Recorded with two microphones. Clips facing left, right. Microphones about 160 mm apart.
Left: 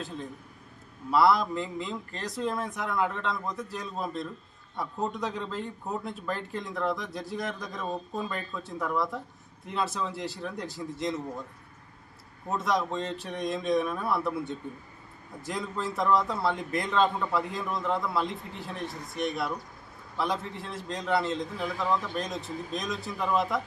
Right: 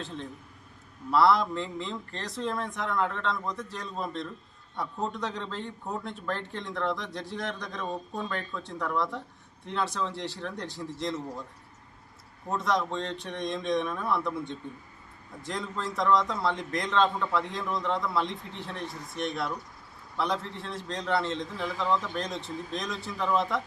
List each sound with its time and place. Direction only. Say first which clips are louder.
0.0 s a man's voice: left 1 dB; 5° left (ahead or behind)
12.5 s a man's voice: even; centre (ahead or behind)